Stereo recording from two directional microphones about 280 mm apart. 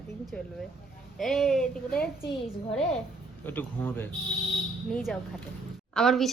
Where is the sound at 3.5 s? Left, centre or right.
Centre.